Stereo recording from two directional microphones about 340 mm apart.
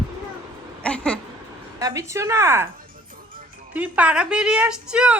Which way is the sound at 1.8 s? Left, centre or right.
Centre.